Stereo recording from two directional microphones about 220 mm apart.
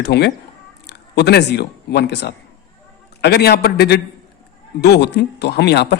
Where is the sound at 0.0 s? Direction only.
50° left (ahead or behind).